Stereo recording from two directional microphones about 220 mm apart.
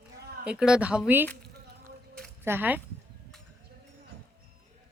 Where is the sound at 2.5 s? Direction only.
10° right (ahead or behind).